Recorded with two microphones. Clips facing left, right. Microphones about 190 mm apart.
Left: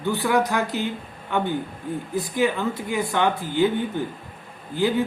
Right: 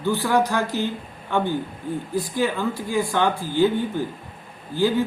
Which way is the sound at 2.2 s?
20° left (ahead or behind).